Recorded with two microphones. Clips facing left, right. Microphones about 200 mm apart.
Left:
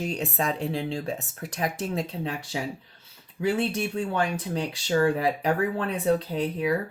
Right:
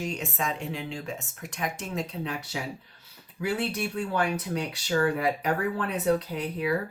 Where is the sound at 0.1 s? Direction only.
35° left (ahead or behind).